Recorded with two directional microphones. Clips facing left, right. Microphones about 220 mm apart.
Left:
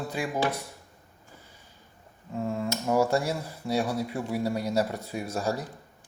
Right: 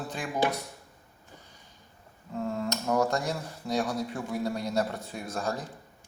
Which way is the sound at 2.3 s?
5° left (ahead or behind).